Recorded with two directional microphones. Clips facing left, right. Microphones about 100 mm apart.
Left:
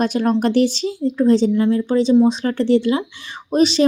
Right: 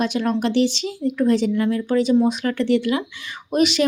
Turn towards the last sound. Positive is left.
turn(degrees=30)  # may be behind; listen again after turning